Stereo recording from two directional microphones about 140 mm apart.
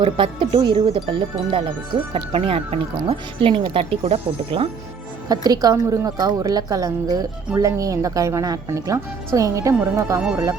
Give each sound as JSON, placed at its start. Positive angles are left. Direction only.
{"t": 0.0, "sound": "speech", "side_deg": -40}
{"t": 5.3, "sound": "a woman's voice", "side_deg": -25}
{"t": 10.2, "sound": "speech", "side_deg": -5}